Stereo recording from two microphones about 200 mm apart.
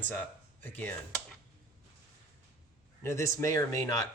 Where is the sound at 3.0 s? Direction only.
15° left (ahead or behind).